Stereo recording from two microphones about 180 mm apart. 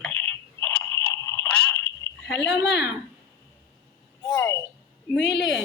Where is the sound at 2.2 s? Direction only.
80° left.